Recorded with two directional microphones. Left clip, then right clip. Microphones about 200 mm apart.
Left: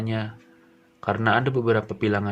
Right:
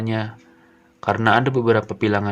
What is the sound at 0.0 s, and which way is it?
Speech, 20° right (ahead or behind).